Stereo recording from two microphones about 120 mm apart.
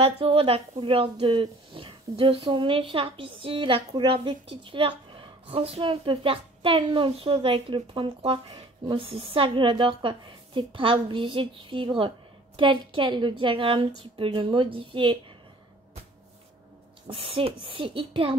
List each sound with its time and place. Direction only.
0.0 s a woman's voice: 50° right (ahead or behind)
17.1 s a woman's voice: 50° right (ahead or behind)